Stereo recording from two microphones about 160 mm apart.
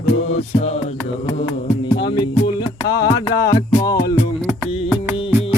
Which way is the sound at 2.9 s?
25° left (ahead or behind).